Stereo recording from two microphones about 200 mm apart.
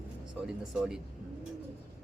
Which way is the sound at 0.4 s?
5° right (ahead or behind).